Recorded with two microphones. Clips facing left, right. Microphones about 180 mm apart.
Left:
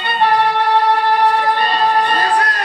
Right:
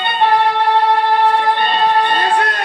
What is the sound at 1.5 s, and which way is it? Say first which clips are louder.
Music: right 1 dB; 25° right (ahead or behind).